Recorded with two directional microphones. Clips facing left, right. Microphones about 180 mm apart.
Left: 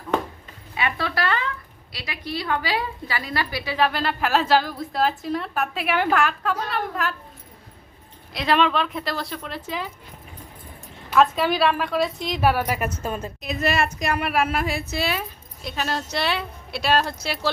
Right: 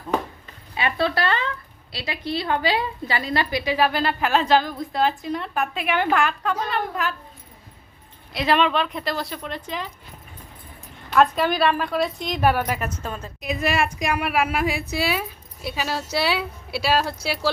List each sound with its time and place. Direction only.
0.8 s a sound: 30° right (ahead or behind)
1.9 s a woman's voice: 25° right (ahead or behind)
3.8 s a woman's voice: centre (ahead or behind)
8.3 s a woman's voice: centre (ahead or behind)
11.1 s a woman's voice: centre (ahead or behind)
13.4 s a woman's voice: 10° right (ahead or behind)